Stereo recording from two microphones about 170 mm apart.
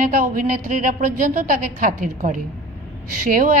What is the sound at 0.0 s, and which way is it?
A woman's voice, 55° right (ahead or behind).